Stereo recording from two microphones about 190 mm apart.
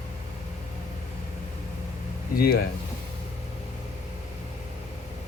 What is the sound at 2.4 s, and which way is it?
Speech, 50° left (ahead or behind).